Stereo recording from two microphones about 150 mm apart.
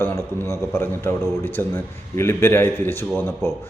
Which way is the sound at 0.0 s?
15° left (ahead or behind).